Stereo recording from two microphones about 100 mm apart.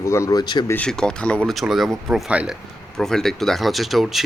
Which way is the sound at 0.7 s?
10° left (ahead or behind).